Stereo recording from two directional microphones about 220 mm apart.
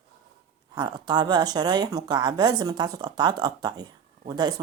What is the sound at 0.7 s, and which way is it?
Speech, 20° right (ahead or behind).